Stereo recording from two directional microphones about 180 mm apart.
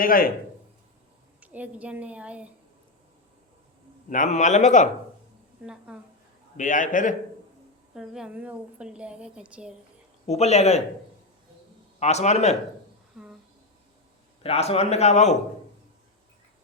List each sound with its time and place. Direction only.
0.0 s a man's voice: 50° left (ahead or behind)
1.4 s a woman's voice: 10° right (ahead or behind)
4.1 s a man's voice: 45° left (ahead or behind)
5.6 s a woman's voice: 5° right (ahead or behind)
6.6 s a man's voice: 45° left (ahead or behind)
7.9 s a woman's voice: 5° right (ahead or behind)
10.2 s a man's voice: 35° left (ahead or behind)
11.9 s a man's voice: 40° left (ahead or behind)
14.4 s a man's voice: 35° left (ahead or behind)